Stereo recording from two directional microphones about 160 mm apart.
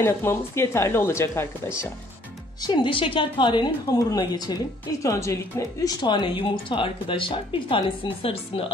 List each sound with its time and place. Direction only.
0.0 s speech: 15° left (ahead or behind)
2.6 s a woman's voice: 30° left (ahead or behind)